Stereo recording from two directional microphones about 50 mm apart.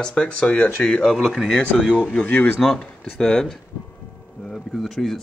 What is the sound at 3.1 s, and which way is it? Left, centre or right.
Speech, centre.